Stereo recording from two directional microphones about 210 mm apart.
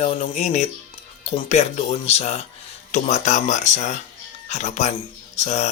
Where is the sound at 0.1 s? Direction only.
35° left (ahead or behind).